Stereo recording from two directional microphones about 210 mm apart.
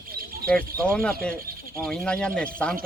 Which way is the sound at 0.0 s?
45° right (ahead or behind).